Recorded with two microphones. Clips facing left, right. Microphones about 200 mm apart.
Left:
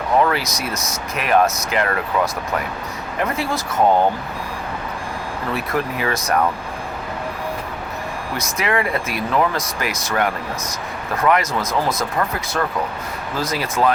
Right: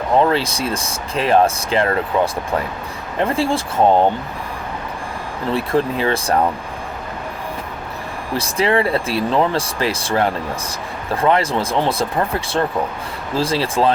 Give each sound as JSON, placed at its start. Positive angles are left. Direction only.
{"t": 0.2, "sound": "speech", "side_deg": -30}
{"t": 5.5, "sound": "speech", "side_deg": -30}
{"t": 8.3, "sound": "speech", "side_deg": -30}